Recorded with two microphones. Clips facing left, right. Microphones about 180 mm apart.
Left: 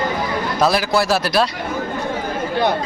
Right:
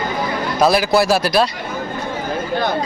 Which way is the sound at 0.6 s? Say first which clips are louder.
Right 3 dB; centre (ahead or behind).